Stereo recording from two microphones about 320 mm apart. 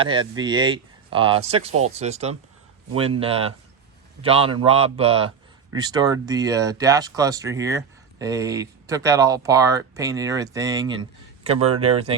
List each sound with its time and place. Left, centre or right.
0.0 s speech: centre